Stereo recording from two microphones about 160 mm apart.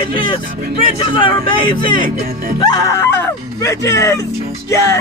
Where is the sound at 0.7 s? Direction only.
35° left (ahead or behind).